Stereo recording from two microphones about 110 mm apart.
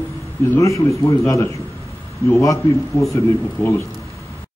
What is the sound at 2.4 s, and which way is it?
A man's voice, 30° left (ahead or behind).